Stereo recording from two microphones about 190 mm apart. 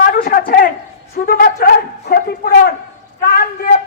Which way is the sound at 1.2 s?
50° left (ahead or behind).